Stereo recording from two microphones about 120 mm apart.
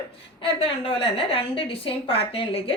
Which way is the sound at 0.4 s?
50° left (ahead or behind).